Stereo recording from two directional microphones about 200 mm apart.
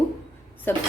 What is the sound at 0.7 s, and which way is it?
Speech, 10° left (ahead or behind).